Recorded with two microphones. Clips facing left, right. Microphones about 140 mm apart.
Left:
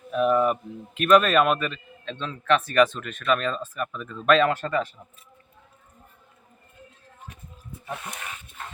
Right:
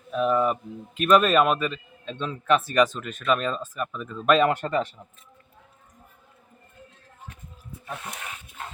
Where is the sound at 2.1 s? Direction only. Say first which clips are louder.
Even; 10° right (ahead or behind).